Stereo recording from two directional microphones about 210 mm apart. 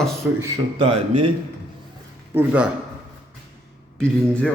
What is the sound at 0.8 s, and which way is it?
Speech, 25° right (ahead or behind).